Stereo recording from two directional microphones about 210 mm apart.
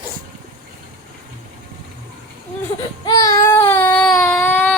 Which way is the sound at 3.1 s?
15° left (ahead or behind).